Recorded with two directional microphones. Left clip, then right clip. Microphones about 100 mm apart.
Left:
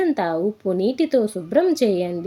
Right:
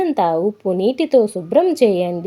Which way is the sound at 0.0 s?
40° right (ahead or behind).